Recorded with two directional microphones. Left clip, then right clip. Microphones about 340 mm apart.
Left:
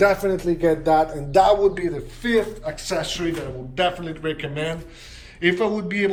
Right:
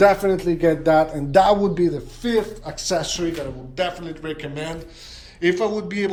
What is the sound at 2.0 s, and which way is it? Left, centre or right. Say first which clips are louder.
A man's voice: left 1 dB; centre.